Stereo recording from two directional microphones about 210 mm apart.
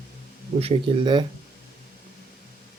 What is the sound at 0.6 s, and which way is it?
Speech, 25° right (ahead or behind).